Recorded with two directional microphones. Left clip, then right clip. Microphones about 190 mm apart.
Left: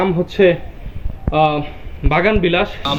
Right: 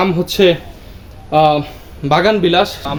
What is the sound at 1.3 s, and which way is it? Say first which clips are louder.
Speech: right 4 dB; 75° right (ahead or behind).